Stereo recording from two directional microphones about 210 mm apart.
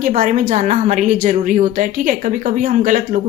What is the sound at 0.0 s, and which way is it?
A woman's voice, 35° right (ahead or behind).